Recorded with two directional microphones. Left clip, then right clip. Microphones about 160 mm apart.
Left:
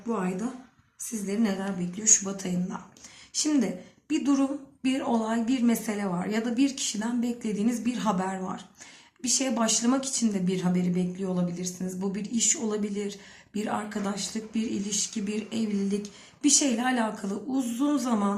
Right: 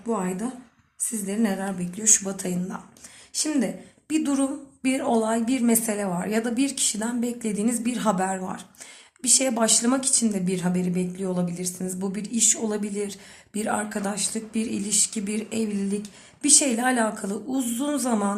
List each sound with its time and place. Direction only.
0.1 s speech: 40° right (ahead or behind)